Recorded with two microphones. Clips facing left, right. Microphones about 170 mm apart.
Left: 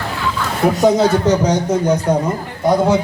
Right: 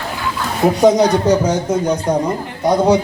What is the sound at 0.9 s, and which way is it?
A man's voice, 15° right (ahead or behind).